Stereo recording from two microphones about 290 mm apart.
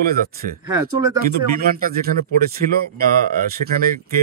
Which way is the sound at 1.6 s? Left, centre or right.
Right.